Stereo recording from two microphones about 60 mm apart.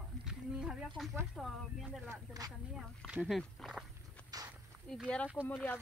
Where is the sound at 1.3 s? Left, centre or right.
Centre.